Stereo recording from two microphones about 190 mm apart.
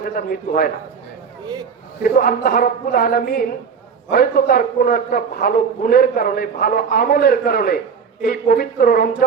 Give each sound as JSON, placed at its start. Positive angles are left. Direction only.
{"t": 0.0, "sound": "a man's voice", "side_deg": 50}
{"t": 2.0, "sound": "a man's voice", "side_deg": 50}